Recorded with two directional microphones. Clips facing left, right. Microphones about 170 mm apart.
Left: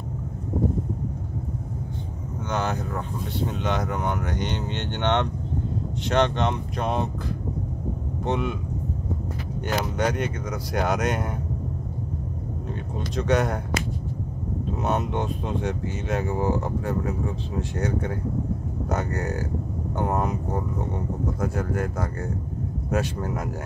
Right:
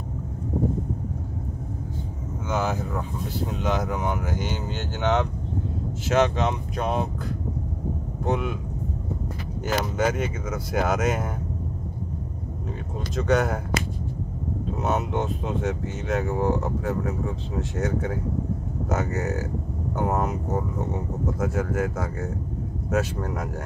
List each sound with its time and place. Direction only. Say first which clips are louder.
2.5 s speech: right 1 dB; centre (ahead or behind)
8.3 s speech: even; centre (ahead or behind)
9.7 s speech: right 1 dB; centre (ahead or behind)
13.1 s speech: right 1 dB; centre (ahead or behind)
14.8 s speech: even; centre (ahead or behind)